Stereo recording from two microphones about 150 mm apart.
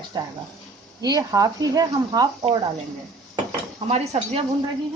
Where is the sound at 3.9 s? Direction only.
45° right (ahead or behind).